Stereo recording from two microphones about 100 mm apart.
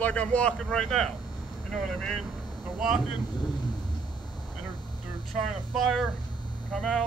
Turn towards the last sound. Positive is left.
turn(degrees=5)  # may be behind; listen again after turning